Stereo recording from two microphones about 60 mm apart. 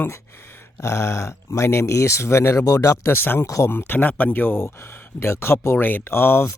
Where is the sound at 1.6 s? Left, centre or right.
Left.